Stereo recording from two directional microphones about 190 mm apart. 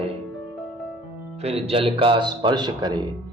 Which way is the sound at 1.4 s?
35° right (ahead or behind).